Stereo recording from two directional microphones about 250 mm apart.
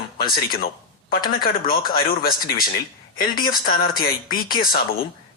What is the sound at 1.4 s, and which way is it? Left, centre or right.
Speech, left.